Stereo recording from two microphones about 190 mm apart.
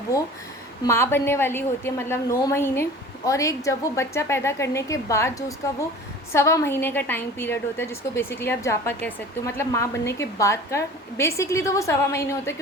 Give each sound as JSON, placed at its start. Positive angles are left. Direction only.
{"t": 0.9, "sound": "a woman's voice", "side_deg": 15}